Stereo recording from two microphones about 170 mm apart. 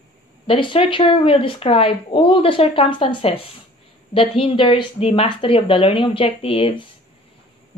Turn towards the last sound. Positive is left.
turn(degrees=30)  # may be behind; listen again after turning